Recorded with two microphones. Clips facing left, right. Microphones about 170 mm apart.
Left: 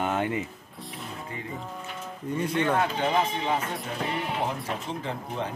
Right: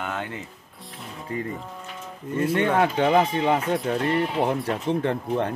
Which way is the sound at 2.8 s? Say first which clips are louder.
Right 6 dB; 65° right (ahead or behind).